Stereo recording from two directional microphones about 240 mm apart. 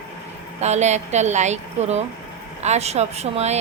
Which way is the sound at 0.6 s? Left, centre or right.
Right.